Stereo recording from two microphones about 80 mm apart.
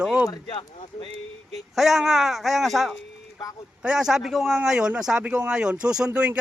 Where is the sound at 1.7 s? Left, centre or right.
Centre.